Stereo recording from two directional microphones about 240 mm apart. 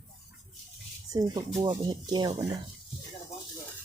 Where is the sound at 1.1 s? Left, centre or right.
Centre.